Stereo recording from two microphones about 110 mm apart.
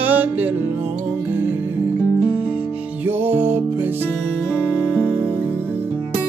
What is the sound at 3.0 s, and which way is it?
Music, 15° right (ahead or behind).